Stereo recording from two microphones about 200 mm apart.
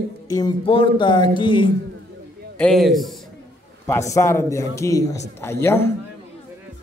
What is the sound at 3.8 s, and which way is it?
A man's voice, 15° left (ahead or behind).